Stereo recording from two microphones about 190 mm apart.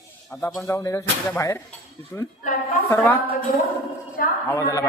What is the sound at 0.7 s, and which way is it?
Speech, 15° left (ahead or behind).